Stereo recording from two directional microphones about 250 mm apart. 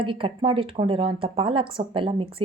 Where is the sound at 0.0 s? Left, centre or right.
Right.